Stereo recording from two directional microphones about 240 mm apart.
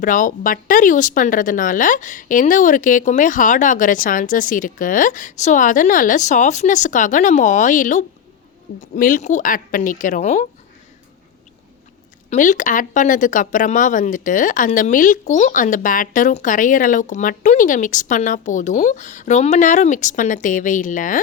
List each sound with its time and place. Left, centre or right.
0.0 s speech: left
12.3 s speech: left